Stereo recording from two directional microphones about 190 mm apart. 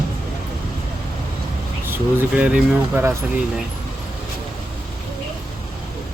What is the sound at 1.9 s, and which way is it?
Speech, 10° right (ahead or behind).